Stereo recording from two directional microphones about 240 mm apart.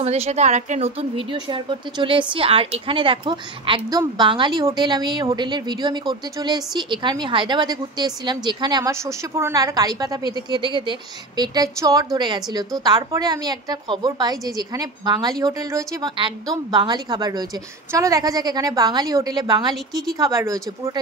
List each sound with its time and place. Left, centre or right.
0.0 s a woman's voice: right